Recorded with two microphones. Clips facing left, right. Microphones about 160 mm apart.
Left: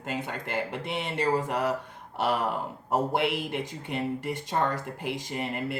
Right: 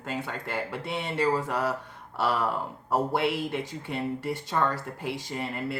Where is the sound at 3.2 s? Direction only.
15° left (ahead or behind).